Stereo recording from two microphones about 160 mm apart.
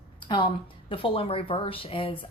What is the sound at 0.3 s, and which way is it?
A woman's voice, 30° left (ahead or behind).